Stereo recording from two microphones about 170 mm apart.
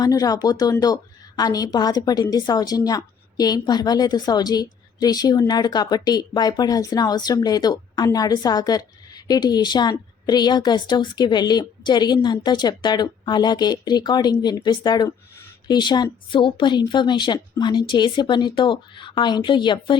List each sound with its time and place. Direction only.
0.0 s a woman's voice: 20° left (ahead or behind)